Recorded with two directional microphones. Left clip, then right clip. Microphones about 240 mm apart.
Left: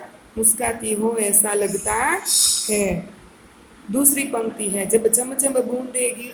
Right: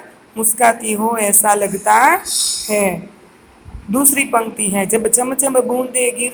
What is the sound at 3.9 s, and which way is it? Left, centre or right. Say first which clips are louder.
A woman's voice: right 7 dB; right.